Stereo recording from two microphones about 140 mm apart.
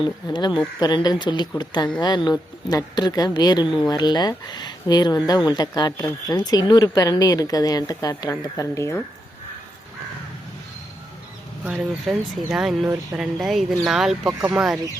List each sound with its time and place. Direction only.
0.0 s speech: 35° left (ahead or behind)
11.6 s speech: 5° right (ahead or behind)